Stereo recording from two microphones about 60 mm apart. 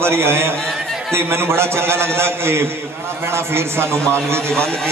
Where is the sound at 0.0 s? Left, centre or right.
Right.